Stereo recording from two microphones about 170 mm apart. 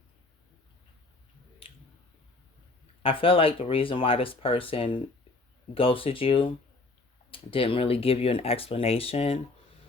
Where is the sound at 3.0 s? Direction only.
30° left (ahead or behind).